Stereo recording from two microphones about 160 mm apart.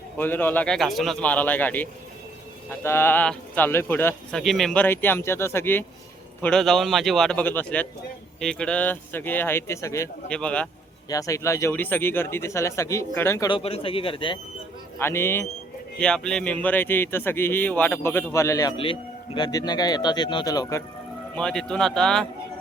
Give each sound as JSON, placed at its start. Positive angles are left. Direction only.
{"t": 0.2, "sound": "speech", "side_deg": 10}
{"t": 4.4, "sound": "speech", "side_deg": 0}
{"t": 6.4, "sound": "speech", "side_deg": 5}
{"t": 10.2, "sound": "speech", "side_deg": 5}
{"t": 11.1, "sound": "speech", "side_deg": 20}
{"t": 13.5, "sound": "a man's voice", "side_deg": 35}
{"t": 14.9, "sound": "speech", "side_deg": 15}
{"t": 16.0, "sound": "speech", "side_deg": 5}
{"t": 18.8, "sound": "speech", "side_deg": 35}
{"t": 21.3, "sound": "speech", "side_deg": 5}